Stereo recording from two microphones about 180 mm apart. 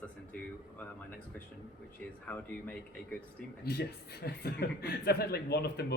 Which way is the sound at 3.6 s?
60° left (ahead or behind).